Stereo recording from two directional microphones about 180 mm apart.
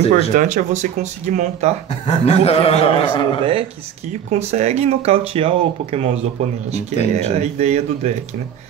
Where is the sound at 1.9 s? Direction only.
40° left (ahead or behind).